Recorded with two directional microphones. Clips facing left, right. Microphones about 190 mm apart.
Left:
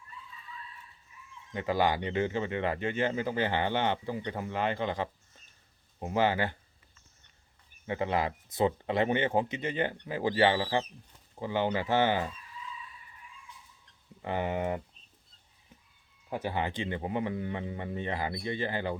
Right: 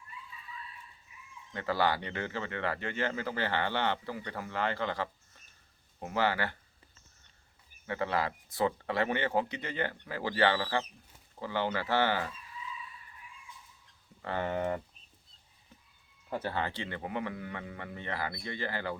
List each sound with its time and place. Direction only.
1.1 s chicken: 10° right (ahead or behind)
1.5 s speech: 15° left (ahead or behind)
7.9 s speech: 20° left (ahead or behind)
14.2 s speech: 15° left (ahead or behind)
16.3 s speech: 15° left (ahead or behind)